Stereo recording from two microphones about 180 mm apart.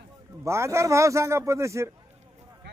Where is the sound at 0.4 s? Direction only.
15° right (ahead or behind).